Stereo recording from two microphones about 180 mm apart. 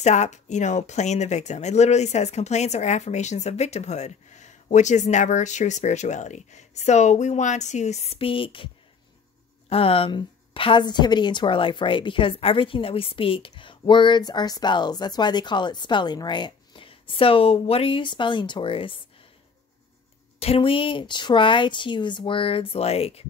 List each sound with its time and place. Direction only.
0.0 s speech: 40° left (ahead or behind)
9.7 s a woman's voice: 30° left (ahead or behind)
20.3 s a woman's voice: 35° left (ahead or behind)